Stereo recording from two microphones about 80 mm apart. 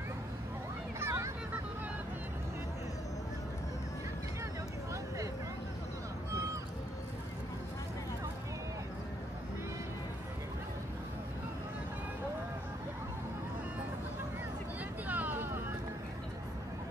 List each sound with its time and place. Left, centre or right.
0.9 s vehicle: right
15.0 s vehicle: right